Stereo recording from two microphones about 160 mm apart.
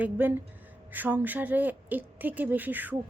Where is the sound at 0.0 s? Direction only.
10° right (ahead or behind).